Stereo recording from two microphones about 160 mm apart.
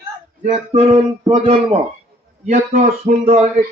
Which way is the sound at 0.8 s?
35° right (ahead or behind).